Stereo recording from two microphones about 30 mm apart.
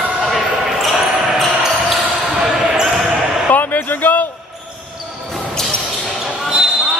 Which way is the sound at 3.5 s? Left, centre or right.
Left.